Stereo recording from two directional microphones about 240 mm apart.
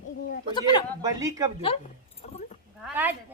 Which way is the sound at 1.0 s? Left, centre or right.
Centre.